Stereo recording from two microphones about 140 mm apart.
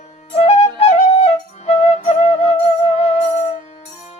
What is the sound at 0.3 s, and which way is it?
Flute, 45° left (ahead or behind).